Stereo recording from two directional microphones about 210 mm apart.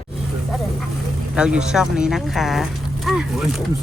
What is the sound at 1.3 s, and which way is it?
Speech, 5° right (ahead or behind).